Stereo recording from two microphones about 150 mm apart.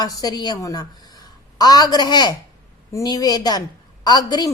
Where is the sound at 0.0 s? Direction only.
25° left (ahead or behind).